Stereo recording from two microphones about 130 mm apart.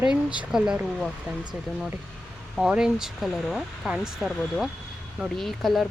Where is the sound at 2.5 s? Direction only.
5° right (ahead or behind).